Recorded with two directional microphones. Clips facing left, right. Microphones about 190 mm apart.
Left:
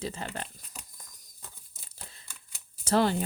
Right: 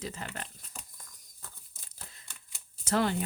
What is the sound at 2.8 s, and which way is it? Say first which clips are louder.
Speech: left 4 dB; 35° left (ahead or behind).